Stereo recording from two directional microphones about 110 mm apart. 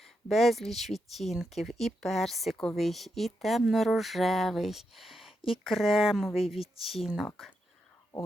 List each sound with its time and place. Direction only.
0.0 s speech: centre (ahead or behind)